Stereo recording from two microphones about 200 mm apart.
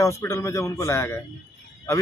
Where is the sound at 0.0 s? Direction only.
15° left (ahead or behind).